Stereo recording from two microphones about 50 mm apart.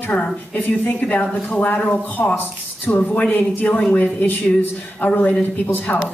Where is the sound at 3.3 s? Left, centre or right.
Left.